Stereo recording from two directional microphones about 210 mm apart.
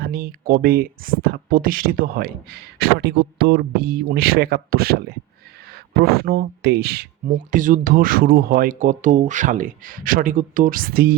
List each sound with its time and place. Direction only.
0.0 s speech: 50° right (ahead or behind)